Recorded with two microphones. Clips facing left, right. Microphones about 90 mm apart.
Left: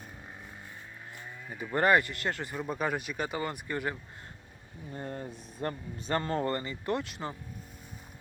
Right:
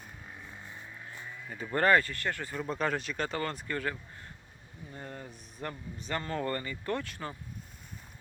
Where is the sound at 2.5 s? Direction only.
10° left (ahead or behind).